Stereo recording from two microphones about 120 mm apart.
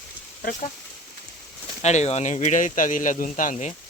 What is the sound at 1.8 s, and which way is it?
Speech, 70° left (ahead or behind).